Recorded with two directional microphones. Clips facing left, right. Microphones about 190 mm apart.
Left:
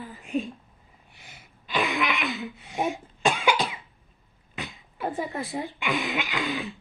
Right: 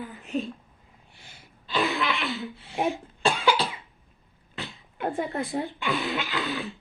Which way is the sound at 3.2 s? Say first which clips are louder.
Even; 15° left (ahead or behind).